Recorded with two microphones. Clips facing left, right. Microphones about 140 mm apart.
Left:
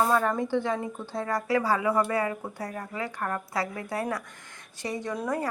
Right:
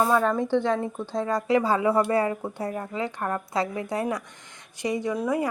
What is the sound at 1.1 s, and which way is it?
Speech, 20° right (ahead or behind).